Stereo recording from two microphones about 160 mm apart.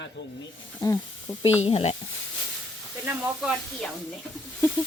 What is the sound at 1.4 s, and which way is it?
Sizzle, 40° left (ahead or behind).